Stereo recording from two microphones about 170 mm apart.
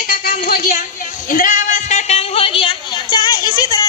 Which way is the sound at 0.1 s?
60° left (ahead or behind).